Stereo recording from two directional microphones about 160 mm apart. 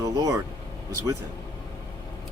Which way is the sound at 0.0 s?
20° right (ahead or behind).